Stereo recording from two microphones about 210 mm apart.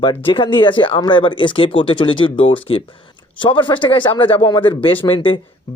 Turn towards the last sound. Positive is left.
turn(degrees=25)  # may be behind; listen again after turning